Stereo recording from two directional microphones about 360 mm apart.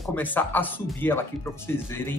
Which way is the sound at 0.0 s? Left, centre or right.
Centre.